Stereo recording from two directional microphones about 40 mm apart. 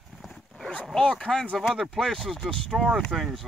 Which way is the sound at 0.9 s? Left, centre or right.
Centre.